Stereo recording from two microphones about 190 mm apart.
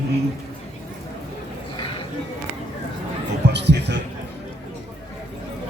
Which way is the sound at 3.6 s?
65° right (ahead or behind).